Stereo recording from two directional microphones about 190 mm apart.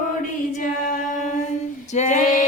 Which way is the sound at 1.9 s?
40° left (ahead or behind).